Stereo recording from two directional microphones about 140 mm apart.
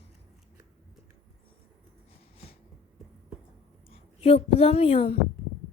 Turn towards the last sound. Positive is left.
turn(degrees=45)  # may be behind; listen again after turning